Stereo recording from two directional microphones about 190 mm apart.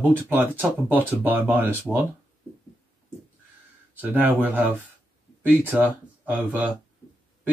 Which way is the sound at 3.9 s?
10° right (ahead or behind).